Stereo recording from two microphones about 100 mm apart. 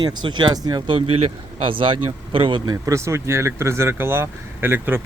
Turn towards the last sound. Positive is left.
turn(degrees=-25)  # may be behind; listen again after turning